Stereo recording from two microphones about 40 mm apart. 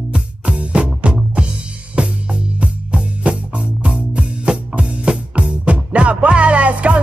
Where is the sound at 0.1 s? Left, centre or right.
Right.